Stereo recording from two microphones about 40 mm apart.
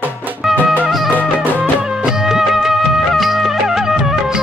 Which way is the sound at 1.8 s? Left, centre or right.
Centre.